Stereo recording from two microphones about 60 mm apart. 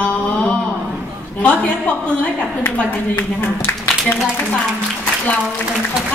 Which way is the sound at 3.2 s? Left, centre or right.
Left.